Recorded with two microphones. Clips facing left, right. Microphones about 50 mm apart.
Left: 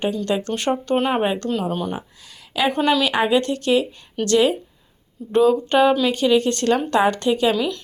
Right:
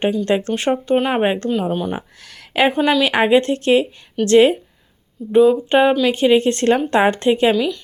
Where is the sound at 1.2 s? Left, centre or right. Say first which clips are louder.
Right 3 dB; right.